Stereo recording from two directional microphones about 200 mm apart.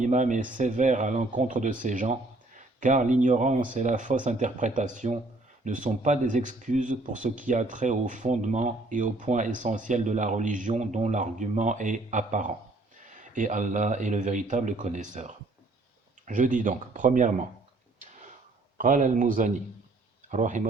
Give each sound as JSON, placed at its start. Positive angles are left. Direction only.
{"t": 0.0, "sound": "speech", "side_deg": -40}
{"t": 18.8, "sound": "speech", "side_deg": -40}